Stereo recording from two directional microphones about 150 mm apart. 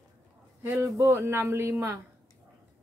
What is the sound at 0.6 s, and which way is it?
A man's voice, 15° right (ahead or behind).